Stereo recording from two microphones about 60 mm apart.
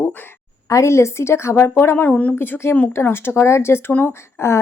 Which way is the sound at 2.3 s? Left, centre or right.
Left.